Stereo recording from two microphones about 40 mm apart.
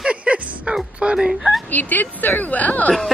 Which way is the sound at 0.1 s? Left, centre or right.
Right.